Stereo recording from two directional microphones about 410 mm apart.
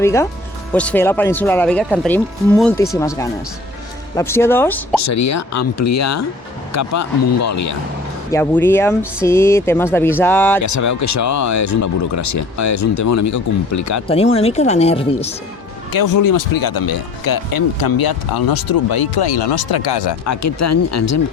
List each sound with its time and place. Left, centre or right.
0.0 s speech: centre
5.0 s speech: left
8.3 s speech: centre
10.6 s speech: left
14.1 s speech: centre
15.9 s speech: left
20.2 s speech: left